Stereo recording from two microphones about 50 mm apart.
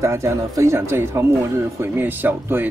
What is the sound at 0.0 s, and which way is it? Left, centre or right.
Speech, right.